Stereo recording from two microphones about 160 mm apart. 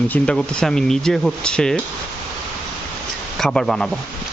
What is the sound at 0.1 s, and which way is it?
Speech, 5° left (ahead or behind).